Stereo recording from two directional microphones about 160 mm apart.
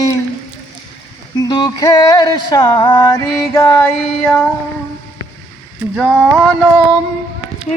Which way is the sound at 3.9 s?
5° left (ahead or behind).